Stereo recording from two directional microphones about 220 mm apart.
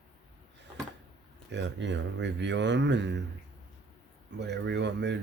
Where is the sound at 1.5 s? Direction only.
55° right (ahead or behind).